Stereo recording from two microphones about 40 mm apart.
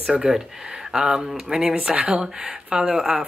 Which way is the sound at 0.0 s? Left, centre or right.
Centre.